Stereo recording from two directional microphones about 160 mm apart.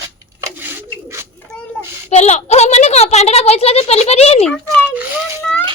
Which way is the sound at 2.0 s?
45° left (ahead or behind).